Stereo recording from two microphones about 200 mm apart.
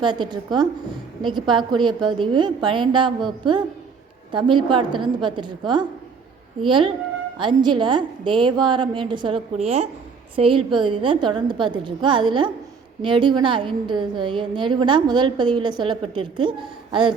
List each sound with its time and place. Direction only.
0.0 s a woman's voice: 20° right (ahead or behind)